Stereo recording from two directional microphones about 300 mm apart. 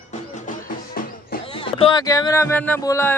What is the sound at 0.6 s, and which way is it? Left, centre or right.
Music, left.